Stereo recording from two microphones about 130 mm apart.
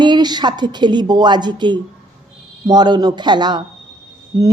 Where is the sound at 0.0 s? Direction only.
35° right (ahead or behind).